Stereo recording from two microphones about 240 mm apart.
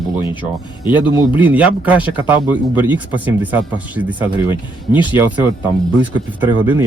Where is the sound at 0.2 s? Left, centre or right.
Centre.